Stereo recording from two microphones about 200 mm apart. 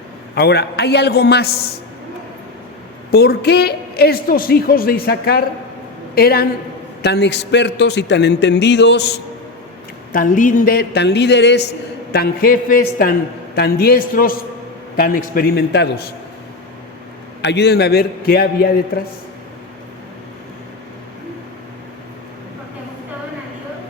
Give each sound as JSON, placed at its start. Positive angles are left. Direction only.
{"t": 0.3, "sound": "a woman's voice", "side_deg": 55}
{"t": 3.1, "sound": "a woman's voice", "side_deg": 50}
{"t": 10.1, "sound": "a man's voice", "side_deg": 40}
{"t": 17.4, "sound": "a woman's voice", "side_deg": 55}